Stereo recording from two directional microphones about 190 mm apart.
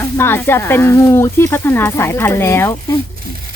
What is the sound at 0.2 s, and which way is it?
Speech, 10° left (ahead or behind).